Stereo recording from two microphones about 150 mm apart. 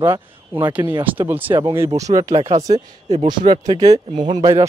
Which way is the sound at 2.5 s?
50° right (ahead or behind).